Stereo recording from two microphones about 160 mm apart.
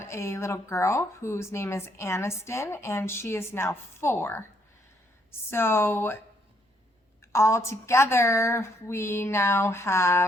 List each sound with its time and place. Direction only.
0.0 s speech: 15° left (ahead or behind)
7.3 s speech: 15° left (ahead or behind)